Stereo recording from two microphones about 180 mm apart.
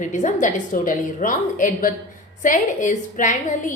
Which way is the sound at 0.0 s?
45° left (ahead or behind).